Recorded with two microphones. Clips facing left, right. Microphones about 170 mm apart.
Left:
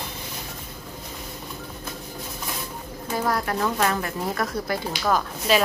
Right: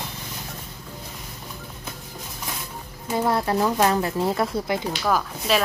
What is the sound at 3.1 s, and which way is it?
Speech, 25° right (ahead or behind).